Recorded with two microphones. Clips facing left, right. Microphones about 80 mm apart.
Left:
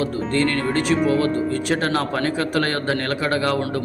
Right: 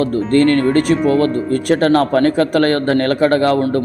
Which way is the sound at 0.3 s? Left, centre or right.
Right.